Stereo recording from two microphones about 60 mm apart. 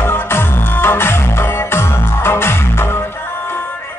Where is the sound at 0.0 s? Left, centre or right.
Left.